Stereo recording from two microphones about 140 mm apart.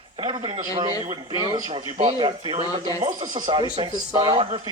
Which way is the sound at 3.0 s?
60° right (ahead or behind).